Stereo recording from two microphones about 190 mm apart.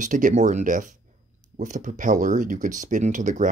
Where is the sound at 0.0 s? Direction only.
40° right (ahead or behind).